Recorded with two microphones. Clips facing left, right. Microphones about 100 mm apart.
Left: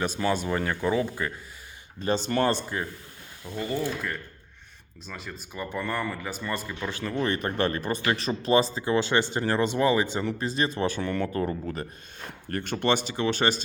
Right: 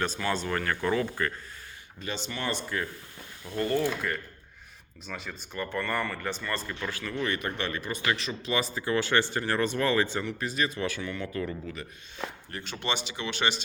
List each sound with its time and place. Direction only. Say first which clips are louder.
0.3 s speech: left 4 dB; 15° left (ahead or behind)
2.0 s speech: left 10 dB; 40° left (ahead or behind)
3.4 s speech: right 2 dB; 5° left (ahead or behind)
7.0 s speech: left 4 dB; 30° left (ahead or behind)
10.2 s speech: left 3 dB; 35° left (ahead or behind)
11.3 s speech: left 5 dB; 40° left (ahead or behind)